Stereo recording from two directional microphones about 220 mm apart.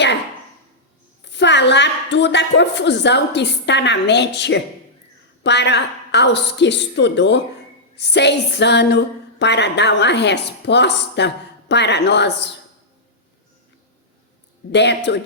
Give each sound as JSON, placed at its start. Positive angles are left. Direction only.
{"t": 1.2, "sound": "a woman's voice", "side_deg": 55}
{"t": 14.7, "sound": "a woman's voice", "side_deg": 50}